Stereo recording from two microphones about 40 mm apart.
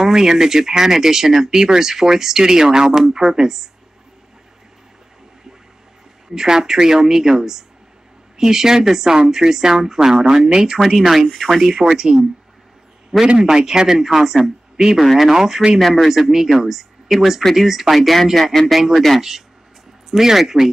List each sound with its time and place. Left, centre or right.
0.0 s speech: centre
6.3 s speech: centre
11.0 s speech: centre
11.8 s speech: centre
13.4 s speech: centre
15.2 s speech: centre
18.8 s speech: centre